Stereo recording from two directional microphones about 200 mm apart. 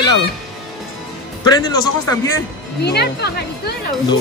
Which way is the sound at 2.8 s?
55° left (ahead or behind).